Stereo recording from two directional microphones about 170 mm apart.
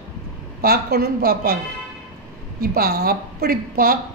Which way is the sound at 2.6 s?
60° right (ahead or behind).